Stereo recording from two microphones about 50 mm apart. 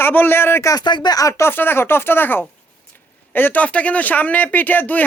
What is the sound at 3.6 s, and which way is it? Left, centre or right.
Speech, left.